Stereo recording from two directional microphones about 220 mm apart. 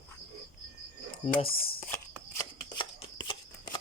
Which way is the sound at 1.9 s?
15° left (ahead or behind).